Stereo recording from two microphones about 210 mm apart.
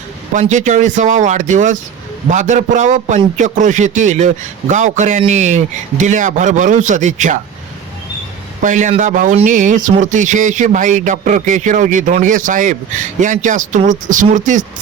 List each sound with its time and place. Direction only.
0.3 s a man's voice: 35° right (ahead or behind)
8.6 s a man's voice: 35° right (ahead or behind)